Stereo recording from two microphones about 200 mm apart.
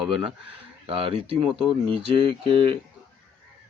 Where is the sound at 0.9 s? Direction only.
25° right (ahead or behind).